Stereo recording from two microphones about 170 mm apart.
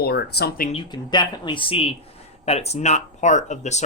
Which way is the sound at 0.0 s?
65° left (ahead or behind).